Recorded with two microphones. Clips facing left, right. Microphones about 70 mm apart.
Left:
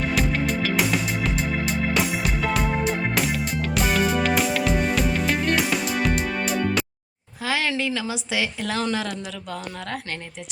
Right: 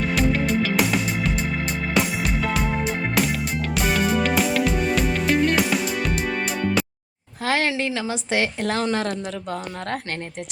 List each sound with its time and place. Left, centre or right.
0.0 s music: centre
7.4 s a sound: right
8.0 s a woman's voice: right